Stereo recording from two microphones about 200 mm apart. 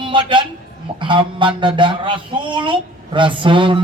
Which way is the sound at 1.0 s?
25° right (ahead or behind).